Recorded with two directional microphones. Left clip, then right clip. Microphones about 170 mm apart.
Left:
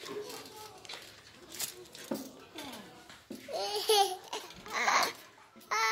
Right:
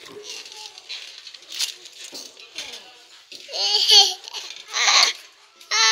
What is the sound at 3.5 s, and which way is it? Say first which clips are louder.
Babbling: right 14 dB; 25° left (ahead or behind).